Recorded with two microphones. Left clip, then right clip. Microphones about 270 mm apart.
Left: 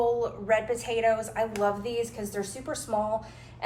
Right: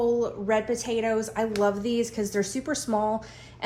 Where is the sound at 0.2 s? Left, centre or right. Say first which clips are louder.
Right 1 dB; right.